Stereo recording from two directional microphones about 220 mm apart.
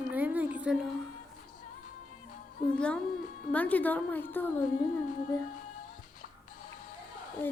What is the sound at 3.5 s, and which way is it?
A woman's voice, 5° left (ahead or behind).